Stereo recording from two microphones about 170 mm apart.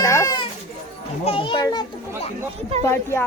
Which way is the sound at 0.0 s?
20° left (ahead or behind).